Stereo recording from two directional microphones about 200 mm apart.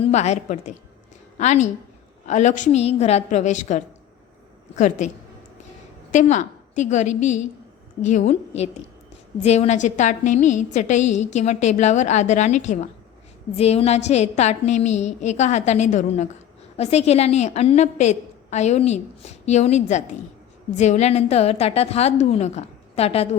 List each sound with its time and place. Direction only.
0.1 s a woman's voice: 35° left (ahead or behind)